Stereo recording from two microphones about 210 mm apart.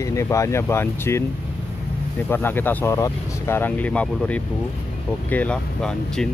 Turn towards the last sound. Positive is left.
turn(degrees=5)  # may be behind; listen again after turning